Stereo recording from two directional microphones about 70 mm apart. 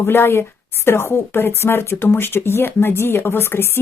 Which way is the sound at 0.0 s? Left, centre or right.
Left.